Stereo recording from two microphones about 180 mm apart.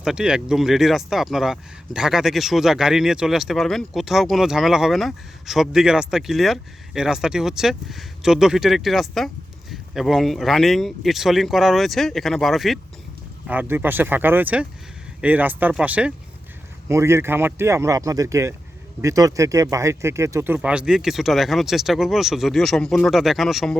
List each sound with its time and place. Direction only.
0.0 s speech: 5° right (ahead or behind)
13.5 s speech: 10° right (ahead or behind)